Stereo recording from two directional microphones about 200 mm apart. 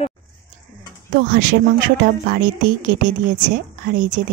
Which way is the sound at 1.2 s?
50° right (ahead or behind).